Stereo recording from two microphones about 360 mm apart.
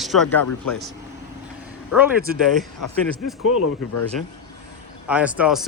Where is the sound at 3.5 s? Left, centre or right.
Left.